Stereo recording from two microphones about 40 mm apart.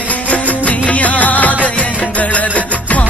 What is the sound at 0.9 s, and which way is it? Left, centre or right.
Music, left.